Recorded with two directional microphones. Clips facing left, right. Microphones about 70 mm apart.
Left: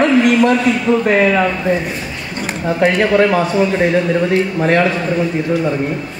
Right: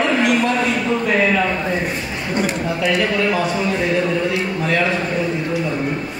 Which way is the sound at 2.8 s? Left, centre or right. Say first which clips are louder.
Left 7 dB; left.